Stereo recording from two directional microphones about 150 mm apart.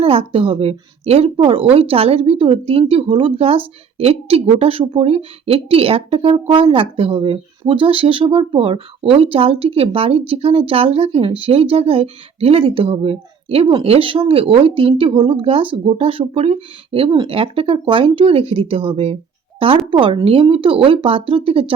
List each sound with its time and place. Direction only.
0.0 s speech: 40° right (ahead or behind)